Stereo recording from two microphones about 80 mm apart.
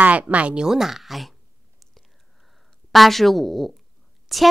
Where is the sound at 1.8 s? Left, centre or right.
Centre.